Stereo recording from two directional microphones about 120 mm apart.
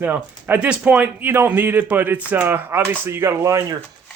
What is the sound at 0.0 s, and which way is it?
Speech, 15° right (ahead or behind).